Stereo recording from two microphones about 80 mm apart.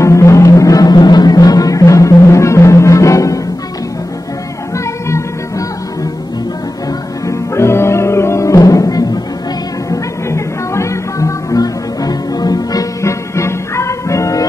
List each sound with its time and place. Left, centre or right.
0.0 s music: left
4.7 s music: left
7.2 s music: left
9.8 s music: left
13.0 s music: left